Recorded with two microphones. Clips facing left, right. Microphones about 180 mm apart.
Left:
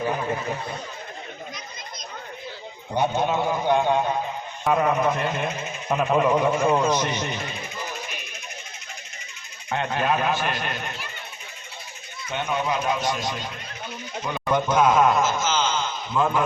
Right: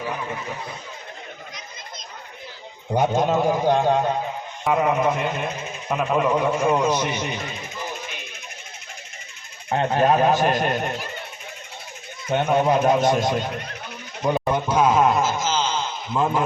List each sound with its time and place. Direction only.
2.9 s speech: 45° right (ahead or behind)
4.6 s a man's voice: 10° right (ahead or behind)
5.9 s a man's voice: 5° left (ahead or behind)
9.6 s speech: 35° right (ahead or behind)
12.3 s speech: 50° right (ahead or behind)
14.3 s a sound: 30° right (ahead or behind)